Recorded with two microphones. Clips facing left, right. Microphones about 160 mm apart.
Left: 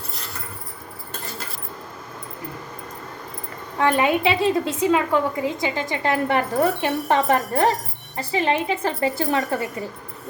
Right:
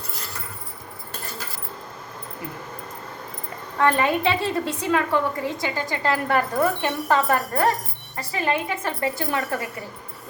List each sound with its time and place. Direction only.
3.8 s a woman's voice: 15° left (ahead or behind)